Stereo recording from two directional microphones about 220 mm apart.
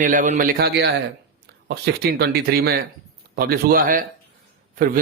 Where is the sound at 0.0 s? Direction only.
35° right (ahead or behind).